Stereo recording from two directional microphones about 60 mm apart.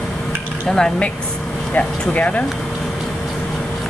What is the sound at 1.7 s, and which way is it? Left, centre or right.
Speech, left.